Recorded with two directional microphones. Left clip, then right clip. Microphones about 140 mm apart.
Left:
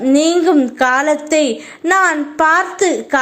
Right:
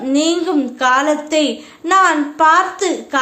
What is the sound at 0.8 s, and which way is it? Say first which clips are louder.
A woman's voice: right 3 dB; 40° left (ahead or behind).